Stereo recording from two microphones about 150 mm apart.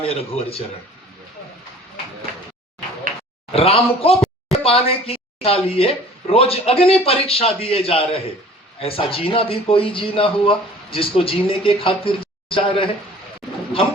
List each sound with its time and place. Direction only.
0.0 s speech: 40° left (ahead or behind)
3.5 s speech: 40° left (ahead or behind)